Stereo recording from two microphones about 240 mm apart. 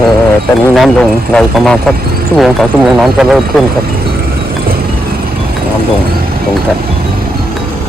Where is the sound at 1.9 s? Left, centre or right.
Right.